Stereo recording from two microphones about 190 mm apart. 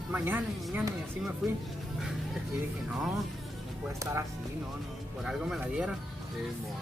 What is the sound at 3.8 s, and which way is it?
Speech, 15° right (ahead or behind).